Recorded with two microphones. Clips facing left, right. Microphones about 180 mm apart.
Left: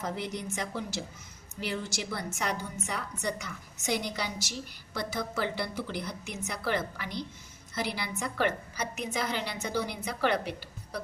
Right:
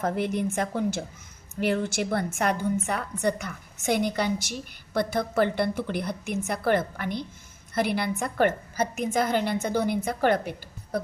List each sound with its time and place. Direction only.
0.0 s a woman's voice: 55° right (ahead or behind)